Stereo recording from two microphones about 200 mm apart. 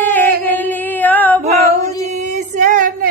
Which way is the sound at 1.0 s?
10° left (ahead or behind).